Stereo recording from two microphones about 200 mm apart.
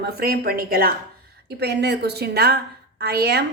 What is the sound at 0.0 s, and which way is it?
Speech, 50° right (ahead or behind).